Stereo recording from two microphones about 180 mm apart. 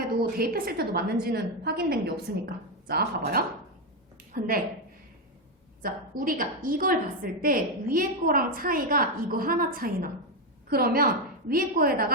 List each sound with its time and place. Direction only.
0.2 s a woman's voice: 55° right (ahead or behind)
5.8 s a woman's voice: 50° right (ahead or behind)